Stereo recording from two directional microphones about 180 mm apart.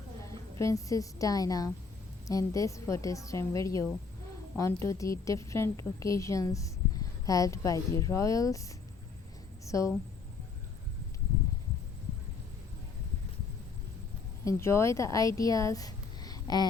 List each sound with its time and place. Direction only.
0.6 s a woman's voice: 20° left (ahead or behind)
9.6 s a woman's voice: 15° left (ahead or behind)
14.4 s speech: 15° left (ahead or behind)